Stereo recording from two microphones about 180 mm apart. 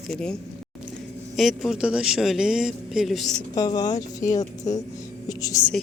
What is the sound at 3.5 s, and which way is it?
Speech, 20° left (ahead or behind).